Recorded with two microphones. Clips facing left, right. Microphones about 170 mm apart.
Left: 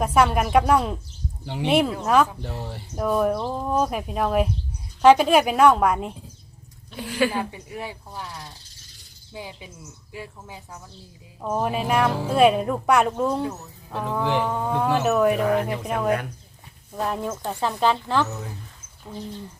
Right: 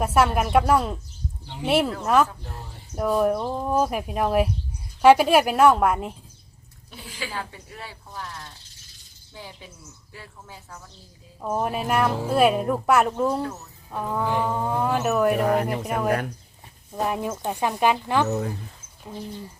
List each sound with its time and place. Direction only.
0.0 s speech: 5° right (ahead or behind)
2.4 s speech: 75° left (ahead or behind)
2.9 s speech: 5° right (ahead or behind)
7.1 s a woman's voice: 65° left (ahead or behind)
7.3 s speech: 15° left (ahead or behind)
11.4 s speech: 5° right (ahead or behind)
15.4 s speech: 45° right (ahead or behind)
15.8 s speech: 5° right (ahead or behind)
18.3 s speech: 50° right (ahead or behind)
19.0 s speech: 10° right (ahead or behind)